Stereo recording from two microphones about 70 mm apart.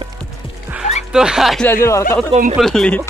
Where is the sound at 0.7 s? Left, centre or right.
Centre.